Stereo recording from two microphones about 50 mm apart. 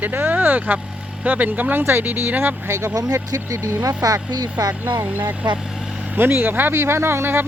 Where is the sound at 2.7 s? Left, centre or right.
Right.